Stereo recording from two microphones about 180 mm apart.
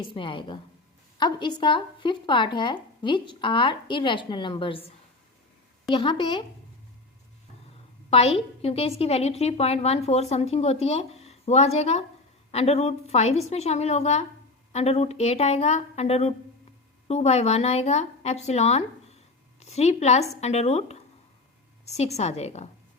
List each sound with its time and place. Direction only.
0.0 s a woman's voice: 25° left (ahead or behind)
5.9 s a woman's voice: 25° left (ahead or behind)
8.1 s a woman's voice: 35° left (ahead or behind)